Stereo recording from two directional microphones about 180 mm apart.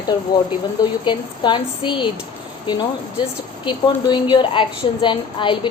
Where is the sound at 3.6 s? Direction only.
25° left (ahead or behind).